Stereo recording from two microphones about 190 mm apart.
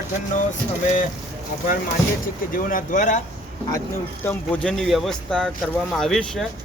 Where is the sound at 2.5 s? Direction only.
45° left (ahead or behind).